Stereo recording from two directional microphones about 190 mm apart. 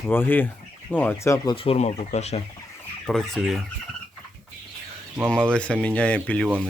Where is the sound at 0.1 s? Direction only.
10° left (ahead or behind).